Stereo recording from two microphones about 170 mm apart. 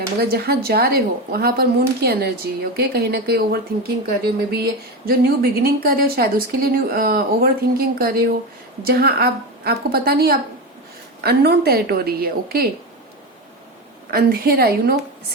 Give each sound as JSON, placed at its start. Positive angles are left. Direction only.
{"t": 0.2, "sound": "a woman's voice", "side_deg": -65}
{"t": 14.1, "sound": "a woman's voice", "side_deg": -60}